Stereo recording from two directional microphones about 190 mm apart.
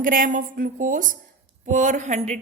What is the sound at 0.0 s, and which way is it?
A woman's voice, 45° right (ahead or behind).